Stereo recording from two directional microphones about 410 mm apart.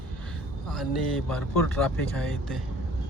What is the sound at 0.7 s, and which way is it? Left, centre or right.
Speech, centre.